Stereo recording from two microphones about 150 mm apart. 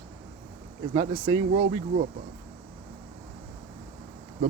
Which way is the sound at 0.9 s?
45° right (ahead or behind).